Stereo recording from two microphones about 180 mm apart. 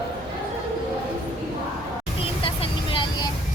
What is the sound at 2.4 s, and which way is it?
Vehicle, 30° left (ahead or behind).